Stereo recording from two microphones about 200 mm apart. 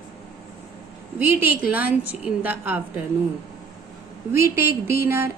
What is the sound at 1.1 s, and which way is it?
A woman's voice, 10° right (ahead or behind).